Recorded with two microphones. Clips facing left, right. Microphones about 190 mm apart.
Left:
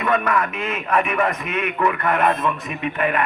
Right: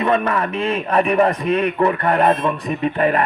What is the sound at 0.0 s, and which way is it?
A man's voice, 30° right (ahead or behind).